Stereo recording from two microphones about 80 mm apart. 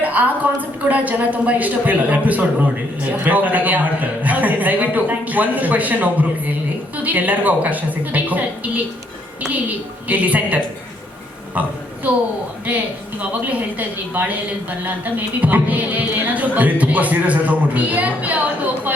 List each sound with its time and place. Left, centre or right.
0.0 s a woman's voice: centre
12.6 s a woman's voice: centre